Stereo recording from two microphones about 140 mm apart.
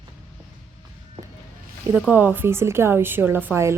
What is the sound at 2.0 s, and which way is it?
A woman's voice, 10° right (ahead or behind).